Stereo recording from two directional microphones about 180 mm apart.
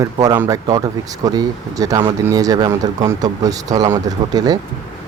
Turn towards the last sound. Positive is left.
turn(degrees=-20)  # may be behind; listen again after turning